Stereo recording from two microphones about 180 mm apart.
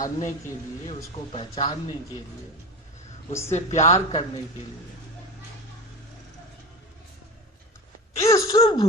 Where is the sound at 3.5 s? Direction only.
40° left (ahead or behind).